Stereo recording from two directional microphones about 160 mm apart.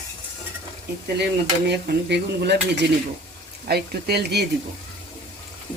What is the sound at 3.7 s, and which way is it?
Speech, 85° right.